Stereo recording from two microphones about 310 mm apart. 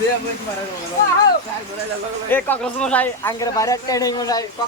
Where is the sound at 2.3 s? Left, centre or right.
Centre.